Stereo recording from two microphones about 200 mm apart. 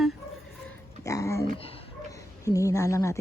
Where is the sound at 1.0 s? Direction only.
15° left (ahead or behind).